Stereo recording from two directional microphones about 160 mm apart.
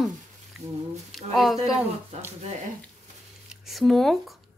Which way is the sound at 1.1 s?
Centre (ahead or behind).